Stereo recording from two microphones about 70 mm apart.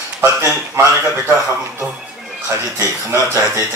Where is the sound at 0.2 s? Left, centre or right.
Right.